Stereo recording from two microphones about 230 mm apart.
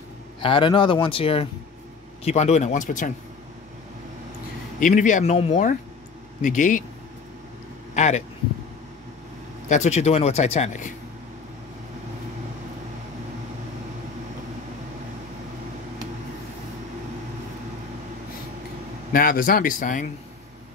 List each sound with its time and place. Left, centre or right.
0.4 s speech: left
4.7 s speech: left
7.9 s speech: left
9.7 s speech: left
19.1 s speech: left